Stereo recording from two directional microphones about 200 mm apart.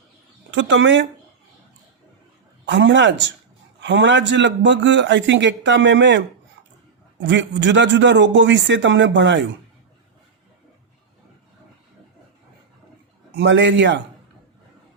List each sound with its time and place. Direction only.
0.5 s speech: 65° right (ahead or behind)
2.6 s a man's voice: 65° right (ahead or behind)
13.3 s a man's voice: 60° right (ahead or behind)